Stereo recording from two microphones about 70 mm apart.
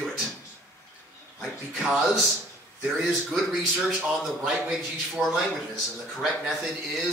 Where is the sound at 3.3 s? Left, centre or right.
Centre.